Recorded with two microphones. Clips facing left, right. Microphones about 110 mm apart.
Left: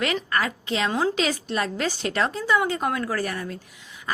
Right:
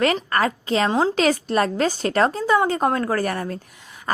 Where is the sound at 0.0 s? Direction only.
45° right (ahead or behind).